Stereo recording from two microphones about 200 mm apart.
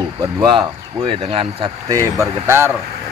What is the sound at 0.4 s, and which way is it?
Speech, 20° right (ahead or behind).